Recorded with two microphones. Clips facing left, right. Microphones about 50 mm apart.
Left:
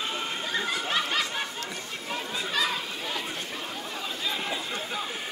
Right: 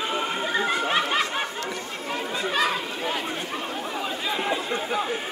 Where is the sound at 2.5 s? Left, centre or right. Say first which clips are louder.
Right 5 dB; right.